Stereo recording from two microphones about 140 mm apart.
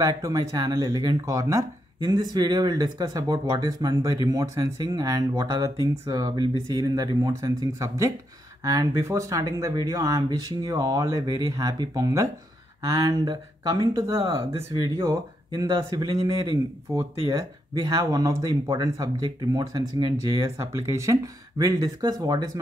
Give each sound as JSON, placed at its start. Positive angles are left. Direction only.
{"t": 0.0, "sound": "speech", "side_deg": -25}